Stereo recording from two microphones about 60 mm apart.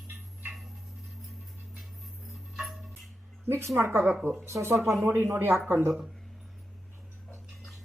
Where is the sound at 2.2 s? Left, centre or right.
Centre.